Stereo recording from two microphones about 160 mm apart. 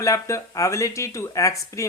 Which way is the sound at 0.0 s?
20° left (ahead or behind).